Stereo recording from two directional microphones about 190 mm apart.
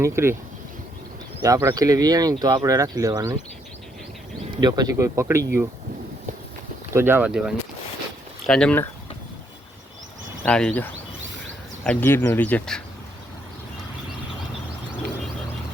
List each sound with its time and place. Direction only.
0.0 s speech: 15° right (ahead or behind)
1.4 s speech: 15° right (ahead or behind)
4.5 s speech: 20° right (ahead or behind)
6.9 s speech: 10° right (ahead or behind); by 8.9 s 5° left (ahead or behind)
10.4 s speech: 5° left (ahead or behind)